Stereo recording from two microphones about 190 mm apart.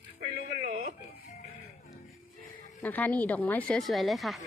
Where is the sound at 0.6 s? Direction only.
50° right (ahead or behind).